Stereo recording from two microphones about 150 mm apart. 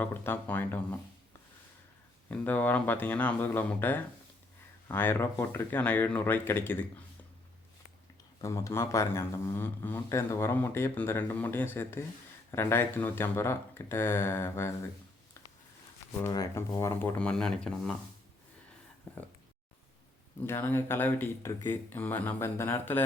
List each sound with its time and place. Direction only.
0.0 s speech: 10° left (ahead or behind)
2.3 s speech: 10° left (ahead or behind)
8.4 s speech: 20° left (ahead or behind)
16.3 s speech: 20° left (ahead or behind)
20.4 s speech: 15° left (ahead or behind)